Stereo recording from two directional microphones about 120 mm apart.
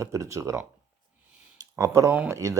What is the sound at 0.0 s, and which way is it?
Speech, 25° right (ahead or behind).